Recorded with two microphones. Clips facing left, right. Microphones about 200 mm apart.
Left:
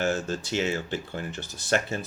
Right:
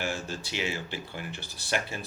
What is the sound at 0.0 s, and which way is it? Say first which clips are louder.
Speech: left 6 dB; 45° left (ahead or behind).